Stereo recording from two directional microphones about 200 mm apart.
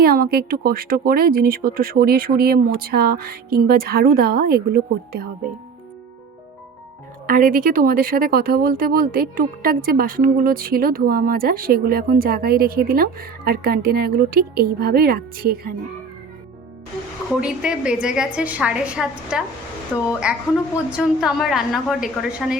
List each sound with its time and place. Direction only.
0.0 s speech: 50° right (ahead or behind)
7.3 s speech: 45° right (ahead or behind)
17.4 s a woman's voice: 5° right (ahead or behind)